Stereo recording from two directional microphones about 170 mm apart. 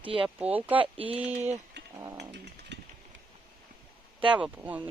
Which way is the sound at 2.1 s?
85° right.